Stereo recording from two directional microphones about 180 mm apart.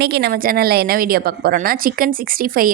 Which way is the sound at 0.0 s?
65° right (ahead or behind).